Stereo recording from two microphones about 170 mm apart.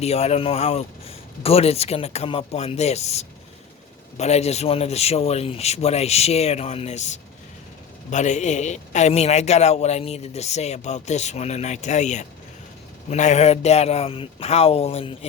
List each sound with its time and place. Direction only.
0.0 s a man's voice: 40° left (ahead or behind)